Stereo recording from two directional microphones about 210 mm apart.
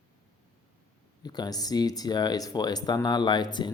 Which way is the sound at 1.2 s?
20° left (ahead or behind).